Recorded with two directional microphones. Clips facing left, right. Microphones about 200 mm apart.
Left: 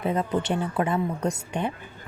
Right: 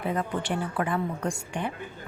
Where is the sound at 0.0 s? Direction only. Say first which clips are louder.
Left 4 dB; 25° left (ahead or behind).